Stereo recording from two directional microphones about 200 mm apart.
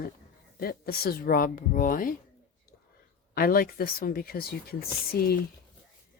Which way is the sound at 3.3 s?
45° left (ahead or behind).